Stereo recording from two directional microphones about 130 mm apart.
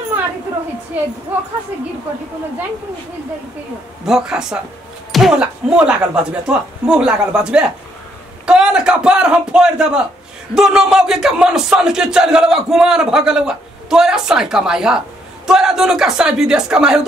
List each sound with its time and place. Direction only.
1.3 s speech: 10° right (ahead or behind)
4.0 s a man's voice: 5° right (ahead or behind)